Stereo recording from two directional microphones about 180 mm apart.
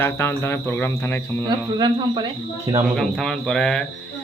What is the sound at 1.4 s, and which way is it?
Speech, 25° right (ahead or behind).